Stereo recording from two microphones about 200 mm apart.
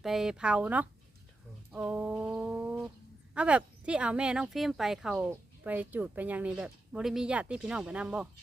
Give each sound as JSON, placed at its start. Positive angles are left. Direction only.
{"t": 0.0, "sound": "speech", "side_deg": 0}
{"t": 1.7, "sound": "a sound", "side_deg": -5}
{"t": 3.3, "sound": "speech", "side_deg": -5}